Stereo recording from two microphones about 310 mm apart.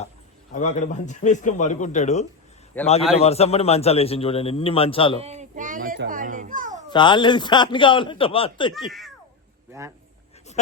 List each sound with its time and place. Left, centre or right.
0.5 s a man's voice: left
2.8 s a man's voice: centre
3.2 s a man's voice: centre
5.2 s a child's voice: right
6.9 s a man's voice: centre
8.9 s cat: centre